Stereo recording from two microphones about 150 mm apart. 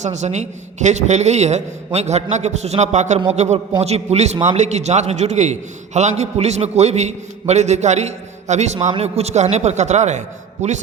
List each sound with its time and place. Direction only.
0.0 s a man's voice: 50° right (ahead or behind)